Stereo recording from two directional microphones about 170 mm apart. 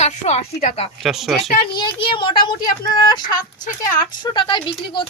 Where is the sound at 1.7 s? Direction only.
30° left (ahead or behind).